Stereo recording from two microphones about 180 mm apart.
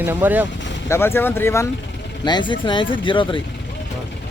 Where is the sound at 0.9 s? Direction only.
15° left (ahead or behind).